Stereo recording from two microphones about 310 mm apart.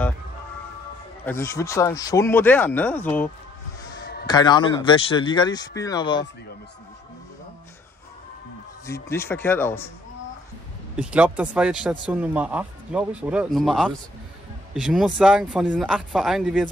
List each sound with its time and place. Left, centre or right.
1.2 s speech: centre
4.0 s a sound: left
4.3 s speech: centre
8.8 s speech: centre
11.0 s speech: centre